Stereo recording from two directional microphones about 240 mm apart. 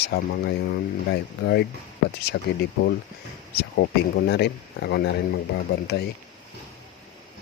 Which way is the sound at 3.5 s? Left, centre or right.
Left.